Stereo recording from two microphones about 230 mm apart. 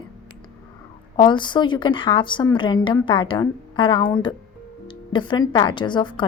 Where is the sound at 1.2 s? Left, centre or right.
Centre.